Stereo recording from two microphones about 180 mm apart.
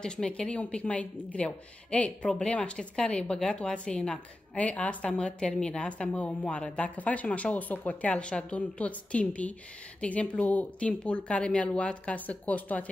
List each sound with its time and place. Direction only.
0.0 s a woman's voice: 5° left (ahead or behind)